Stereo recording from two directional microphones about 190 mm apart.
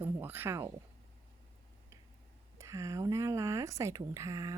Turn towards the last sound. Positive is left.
turn(degrees=-20)  # may be behind; listen again after turning